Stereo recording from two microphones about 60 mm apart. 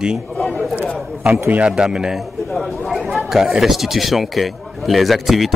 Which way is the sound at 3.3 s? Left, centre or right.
Centre.